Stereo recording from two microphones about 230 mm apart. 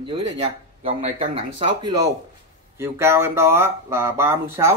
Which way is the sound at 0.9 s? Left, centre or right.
Right.